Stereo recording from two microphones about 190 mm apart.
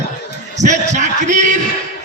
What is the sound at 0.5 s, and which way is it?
A man's voice, 40° right (ahead or behind).